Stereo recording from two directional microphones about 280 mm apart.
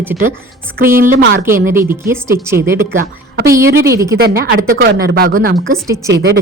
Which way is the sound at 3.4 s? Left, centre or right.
Centre.